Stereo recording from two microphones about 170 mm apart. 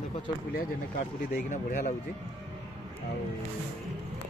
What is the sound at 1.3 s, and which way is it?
Speech, 50° left (ahead or behind).